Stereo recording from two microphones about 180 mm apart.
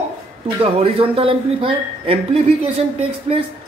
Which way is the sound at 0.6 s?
30° right (ahead or behind).